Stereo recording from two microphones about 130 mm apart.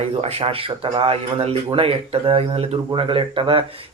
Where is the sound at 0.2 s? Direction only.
50° right (ahead or behind).